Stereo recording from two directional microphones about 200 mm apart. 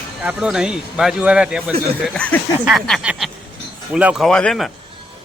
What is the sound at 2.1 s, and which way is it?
A man's voice, 5° left (ahead or behind).